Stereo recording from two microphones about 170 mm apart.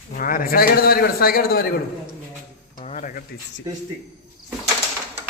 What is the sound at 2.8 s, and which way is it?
Stir, 45° left (ahead or behind).